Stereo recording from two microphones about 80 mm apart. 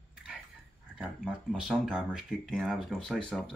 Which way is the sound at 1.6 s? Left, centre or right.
Centre.